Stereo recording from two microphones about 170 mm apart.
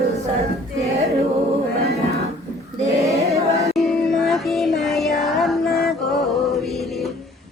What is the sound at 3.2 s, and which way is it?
Music, 35° right (ahead or behind).